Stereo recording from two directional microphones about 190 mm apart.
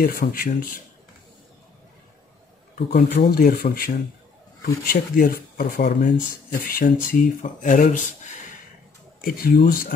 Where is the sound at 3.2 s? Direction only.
50° left (ahead or behind).